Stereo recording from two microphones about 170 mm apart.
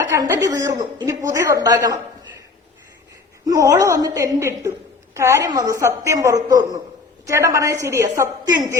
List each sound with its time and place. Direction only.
0.0 s a woman's voice: 15° right (ahead or behind)
3.4 s a woman's voice: 20° right (ahead or behind)